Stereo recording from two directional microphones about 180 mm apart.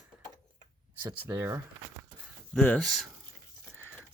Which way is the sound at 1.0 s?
10° right (ahead or behind).